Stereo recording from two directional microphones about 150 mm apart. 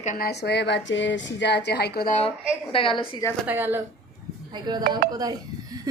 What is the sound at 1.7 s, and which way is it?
Speech, 90° left.